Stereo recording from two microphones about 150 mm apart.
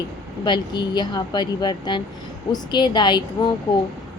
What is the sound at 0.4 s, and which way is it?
A woman's voice, 30° left (ahead or behind).